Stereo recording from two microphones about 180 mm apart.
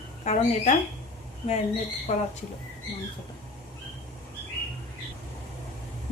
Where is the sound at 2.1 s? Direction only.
40° left (ahead or behind).